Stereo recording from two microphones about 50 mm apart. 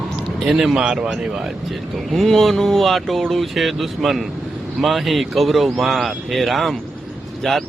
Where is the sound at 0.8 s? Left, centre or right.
Centre.